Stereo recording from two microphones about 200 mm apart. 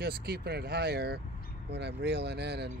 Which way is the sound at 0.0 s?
50° right (ahead or behind).